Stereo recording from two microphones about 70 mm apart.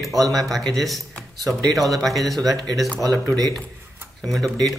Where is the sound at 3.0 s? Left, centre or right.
Right.